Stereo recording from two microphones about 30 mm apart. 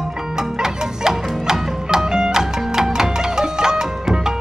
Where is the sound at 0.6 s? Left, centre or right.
Centre.